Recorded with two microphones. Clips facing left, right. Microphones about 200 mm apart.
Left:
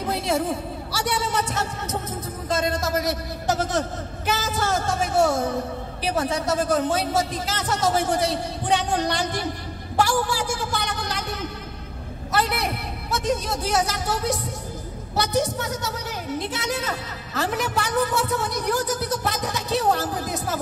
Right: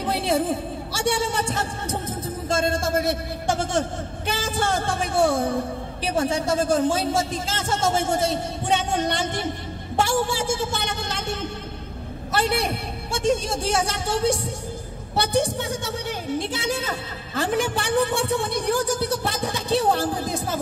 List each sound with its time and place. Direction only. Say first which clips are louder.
0.0 s a sound: right 1 dB; 30° right (ahead or behind)
2.5 s a man's voice: right 1 dB; 30° right (ahead or behind)
4.3 s music: even; 30° right (ahead or behind)
6.1 s a man's voice: right 2 dB; 30° right (ahead or behind)